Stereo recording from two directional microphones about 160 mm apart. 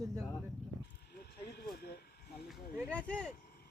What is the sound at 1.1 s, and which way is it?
Vehicle, 80° left.